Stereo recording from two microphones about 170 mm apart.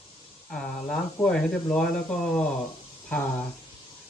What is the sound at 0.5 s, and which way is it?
Speech, 5° left (ahead or behind).